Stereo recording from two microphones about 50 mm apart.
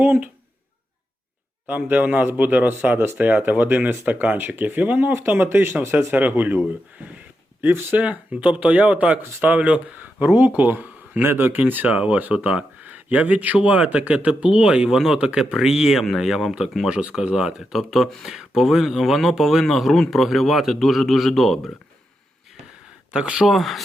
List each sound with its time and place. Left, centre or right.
0.0 s speech: right
1.6 s speech: right
5.8 s speech: right
6.1 s speech: right
7.6 s speech: right
8.0 s speech: right
10.0 s speech: right
11.2 s speech: right
13.7 s a man's voice: centre
16.9 s speech: right
17.2 s a man's voice: centre
23.1 s speech: centre
23.5 s a man's voice: centre